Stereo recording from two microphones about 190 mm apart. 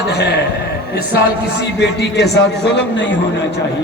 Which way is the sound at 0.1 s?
60° left (ahead or behind).